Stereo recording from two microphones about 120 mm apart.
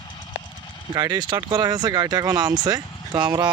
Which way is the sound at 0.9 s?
35° right (ahead or behind).